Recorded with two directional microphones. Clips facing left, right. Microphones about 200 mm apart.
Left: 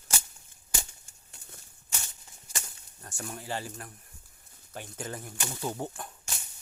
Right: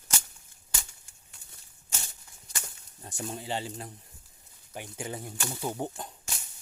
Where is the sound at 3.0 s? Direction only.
20° right (ahead or behind).